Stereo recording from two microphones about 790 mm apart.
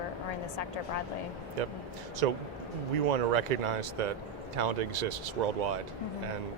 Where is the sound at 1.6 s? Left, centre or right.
Right.